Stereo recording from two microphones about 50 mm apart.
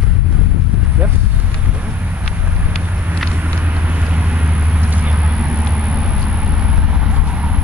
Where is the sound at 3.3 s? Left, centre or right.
Right.